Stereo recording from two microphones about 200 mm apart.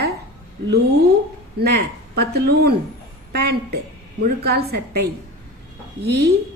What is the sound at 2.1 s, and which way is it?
A woman's voice, 55° right (ahead or behind).